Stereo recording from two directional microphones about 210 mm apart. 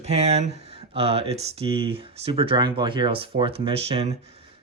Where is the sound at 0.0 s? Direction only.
30° right (ahead or behind).